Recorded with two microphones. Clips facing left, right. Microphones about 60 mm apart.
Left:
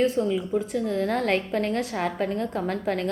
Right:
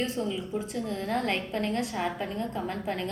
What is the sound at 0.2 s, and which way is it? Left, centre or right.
A woman's voice, left.